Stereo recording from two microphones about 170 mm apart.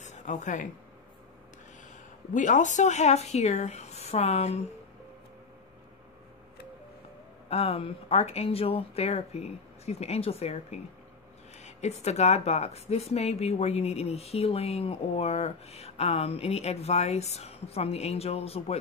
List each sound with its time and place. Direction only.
0.0 s a sound: 45° left (ahead or behind)
2.3 s speech: 50° left (ahead or behind)
7.4 s speech: 35° left (ahead or behind)